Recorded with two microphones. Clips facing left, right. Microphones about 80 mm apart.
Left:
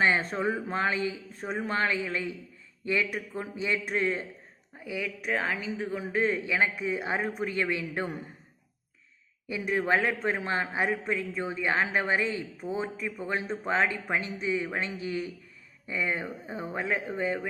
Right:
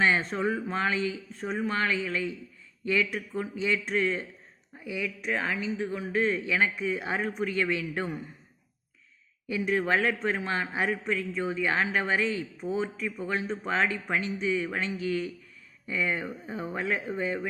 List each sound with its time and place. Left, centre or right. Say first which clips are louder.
0.0 s a sound: even; left
0.3 s speech: even; left
5.8 s a man's voice: right 1 dB; centre
6.1 s speech: even; left
9.5 s speech: even; left
12.5 s a man's voice: right 2 dB; centre
12.8 s speech: right 1 dB; left